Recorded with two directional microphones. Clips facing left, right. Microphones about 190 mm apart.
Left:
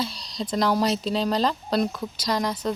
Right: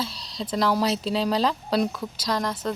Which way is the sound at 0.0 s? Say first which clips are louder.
Left 2 dB; 5° right (ahead or behind).